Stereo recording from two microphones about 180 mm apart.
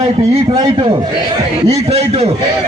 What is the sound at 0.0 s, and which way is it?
A man's voice, 35° right (ahead or behind).